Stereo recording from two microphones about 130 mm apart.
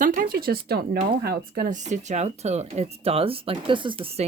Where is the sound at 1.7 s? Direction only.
65° right (ahead or behind); by 4.0 s 40° right (ahead or behind).